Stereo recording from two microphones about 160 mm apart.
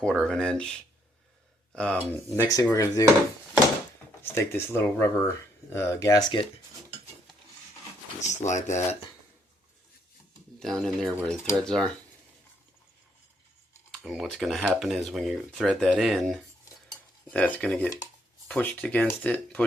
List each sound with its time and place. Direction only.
0.0 s speech: 5° left (ahead or behind)
1.7 s speech: 5° left (ahead or behind)
4.2 s speech: 15° left (ahead or behind)
8.2 s speech: 45° left (ahead or behind)
10.6 s speech: 5° left (ahead or behind)
13.9 s speech: centre (ahead or behind)